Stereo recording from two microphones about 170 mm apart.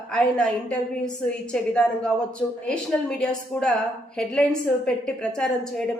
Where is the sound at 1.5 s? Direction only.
5° left (ahead or behind).